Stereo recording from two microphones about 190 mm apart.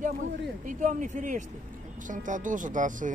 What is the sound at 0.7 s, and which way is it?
Speech, 40° right (ahead or behind).